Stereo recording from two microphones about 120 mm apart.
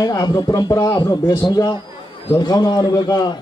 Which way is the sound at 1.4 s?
35° left (ahead or behind).